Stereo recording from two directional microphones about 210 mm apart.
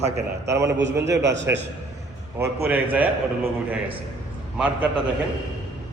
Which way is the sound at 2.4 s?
10° right (ahead or behind).